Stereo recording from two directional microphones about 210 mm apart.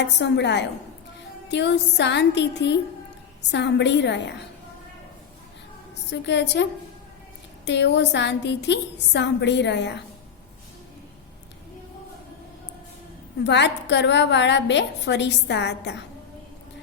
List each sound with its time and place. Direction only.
0.0 s a woman's voice: 55° left (ahead or behind)
6.1 s a woman's voice: 55° left (ahead or behind)
13.4 s a woman's voice: 55° left (ahead or behind)